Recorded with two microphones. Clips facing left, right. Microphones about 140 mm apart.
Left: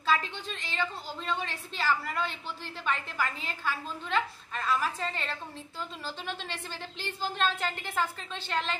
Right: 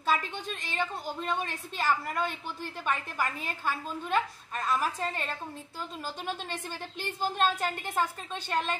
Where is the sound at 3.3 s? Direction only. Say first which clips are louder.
Right 1 dB; 50° right (ahead or behind).